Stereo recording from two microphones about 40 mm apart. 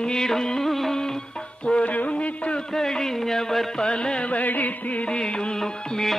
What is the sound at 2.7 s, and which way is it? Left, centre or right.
Music, centre.